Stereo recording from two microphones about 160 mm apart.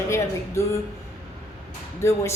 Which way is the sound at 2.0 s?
15° left (ahead or behind).